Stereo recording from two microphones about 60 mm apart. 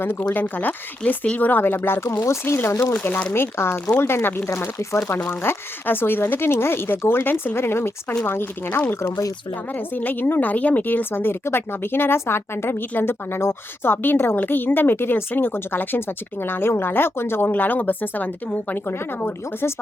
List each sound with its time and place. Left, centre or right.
0.0 s a woman's voice: left
2.8 s speech: left
3.3 s a woman's voice: left
5.3 s a woman's voice: left
9.0 s speech: left
9.7 s speech: left
11.1 s a woman's voice: left
17.5 s speech: left
18.9 s speech: left